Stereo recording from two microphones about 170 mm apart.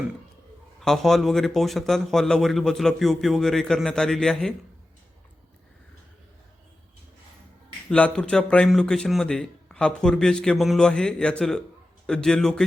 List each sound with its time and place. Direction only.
0.8 s speech: centre (ahead or behind)
7.9 s speech: 5° left (ahead or behind)